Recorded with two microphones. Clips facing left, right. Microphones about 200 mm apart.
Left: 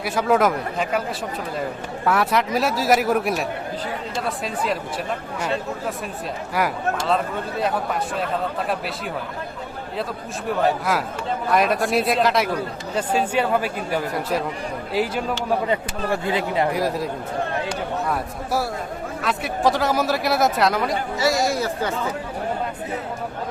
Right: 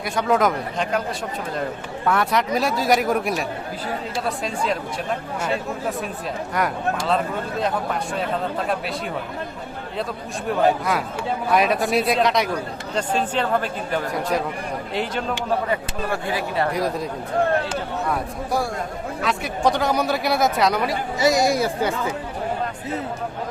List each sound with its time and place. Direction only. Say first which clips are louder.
0.0 s speech: left 1 dB; 5° left (ahead or behind)
2.0 s speech: even; centre (ahead or behind)
6.6 s speech: left 1 dB; 5° left (ahead or behind)
10.6 s speech: right 2 dB; centre (ahead or behind)
15.7 s speech: left 1 dB; 20° left (ahead or behind)
16.7 s speech: left 1 dB; 5° left (ahead or behind)
21.2 s speech: right 3 dB; 15° right (ahead or behind)